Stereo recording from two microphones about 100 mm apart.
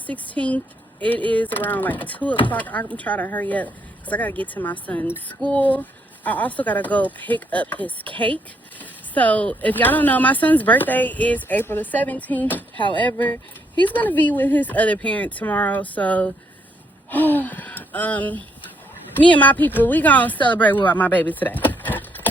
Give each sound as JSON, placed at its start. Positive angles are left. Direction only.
{"t": 0.1, "sound": "a woman's voice", "side_deg": 15}